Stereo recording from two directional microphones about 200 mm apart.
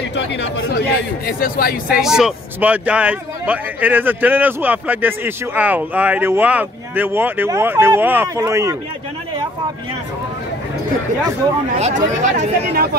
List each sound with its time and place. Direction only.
0.1 s speech: 60° left (ahead or behind)
2.0 s speech: 5° right (ahead or behind)
11.8 s speech: 35° right (ahead or behind)
12.4 s speech: 50° right (ahead or behind)